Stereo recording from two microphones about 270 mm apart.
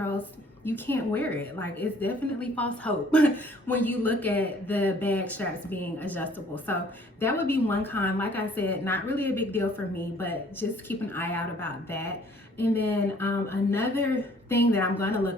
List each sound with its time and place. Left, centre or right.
0.0 s a woman's voice: centre